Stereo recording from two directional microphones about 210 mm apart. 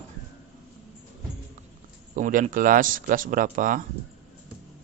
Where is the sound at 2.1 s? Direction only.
35° right (ahead or behind).